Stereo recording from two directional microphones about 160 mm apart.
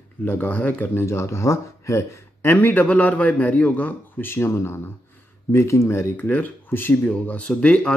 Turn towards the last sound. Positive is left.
turn(degrees=5)  # may be behind; listen again after turning